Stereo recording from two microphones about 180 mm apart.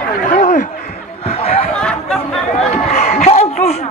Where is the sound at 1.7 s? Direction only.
5° left (ahead or behind).